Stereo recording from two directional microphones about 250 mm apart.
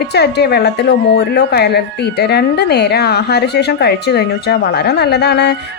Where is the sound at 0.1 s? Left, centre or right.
Left.